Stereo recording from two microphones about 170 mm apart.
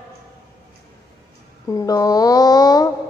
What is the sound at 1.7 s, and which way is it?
A woman's voice, 20° left (ahead or behind).